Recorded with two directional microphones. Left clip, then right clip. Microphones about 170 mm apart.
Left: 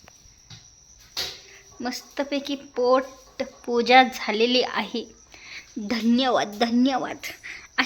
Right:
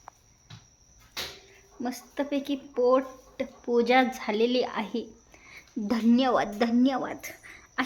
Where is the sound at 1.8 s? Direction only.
5° left (ahead or behind).